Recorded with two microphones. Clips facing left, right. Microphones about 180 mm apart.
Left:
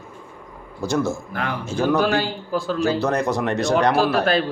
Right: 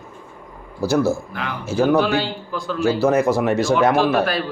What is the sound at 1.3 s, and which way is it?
Speech, 45° left (ahead or behind).